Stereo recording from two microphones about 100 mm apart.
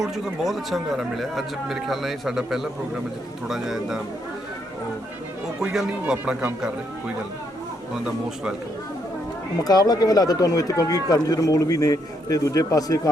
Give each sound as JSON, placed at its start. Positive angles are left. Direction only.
{"t": 0.0, "sound": "speech", "side_deg": 0}
{"t": 5.6, "sound": "speech", "side_deg": -5}
{"t": 9.6, "sound": "speech", "side_deg": 40}